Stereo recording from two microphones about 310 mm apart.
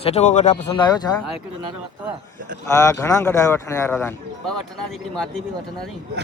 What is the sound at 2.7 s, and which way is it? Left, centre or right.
Speech, centre.